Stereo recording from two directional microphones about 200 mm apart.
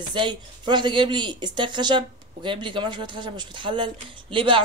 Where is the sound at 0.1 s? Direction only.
25° right (ahead or behind).